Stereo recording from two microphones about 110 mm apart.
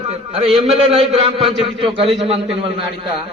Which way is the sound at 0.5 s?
70° right (ahead or behind).